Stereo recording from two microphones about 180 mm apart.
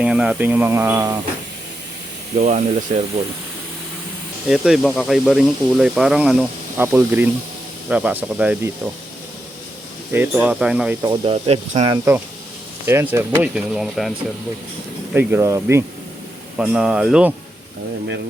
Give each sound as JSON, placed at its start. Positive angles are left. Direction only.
{"t": 0.0, "sound": "speech", "side_deg": -5}
{"t": 2.3, "sound": "speech", "side_deg": -40}
{"t": 4.4, "sound": "speech", "side_deg": -5}
{"t": 10.1, "sound": "speech", "side_deg": -10}
{"t": 11.0, "sound": "speech", "side_deg": -25}
{"t": 11.9, "sound": "speech", "side_deg": -15}
{"t": 15.1, "sound": "speech", "side_deg": -10}